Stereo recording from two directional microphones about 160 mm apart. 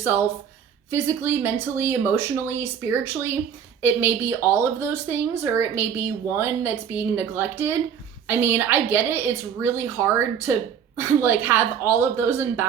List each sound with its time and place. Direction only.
0.9 s speech: 15° right (ahead or behind)